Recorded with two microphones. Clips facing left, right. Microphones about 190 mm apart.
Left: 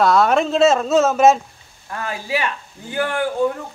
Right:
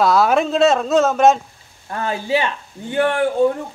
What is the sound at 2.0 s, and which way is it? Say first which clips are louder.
Speech: right 4 dB; 25° right (ahead or behind).